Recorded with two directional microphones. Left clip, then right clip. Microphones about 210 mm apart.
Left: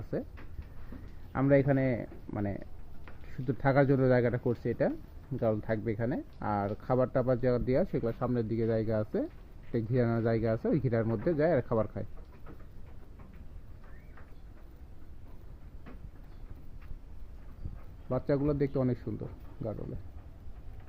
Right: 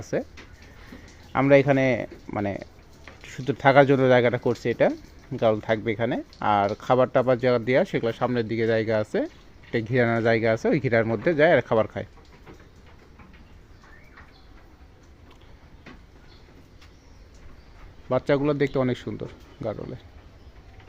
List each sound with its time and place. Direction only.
1.3 s speech: 30° right (ahead or behind)
18.1 s speech: 20° right (ahead or behind)